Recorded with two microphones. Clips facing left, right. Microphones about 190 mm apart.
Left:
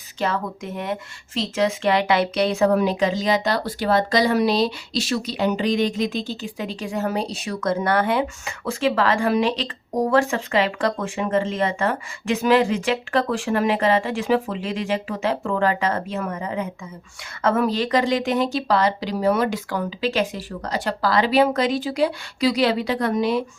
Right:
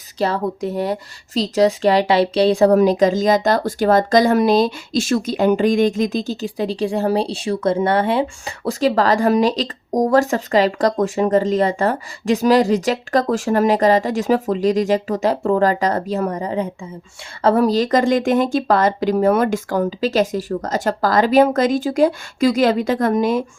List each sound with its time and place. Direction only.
0.2 s speech: 35° right (ahead or behind)